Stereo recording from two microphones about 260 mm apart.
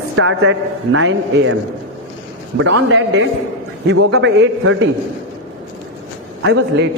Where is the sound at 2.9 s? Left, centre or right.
Right.